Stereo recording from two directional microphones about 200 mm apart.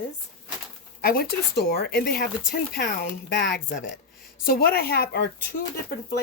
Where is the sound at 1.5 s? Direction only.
50° left (ahead or behind).